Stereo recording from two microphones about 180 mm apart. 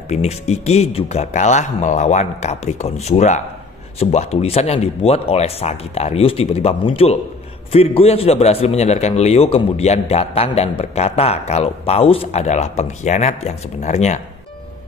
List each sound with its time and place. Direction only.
0.1 s a man's voice: 35° left (ahead or behind)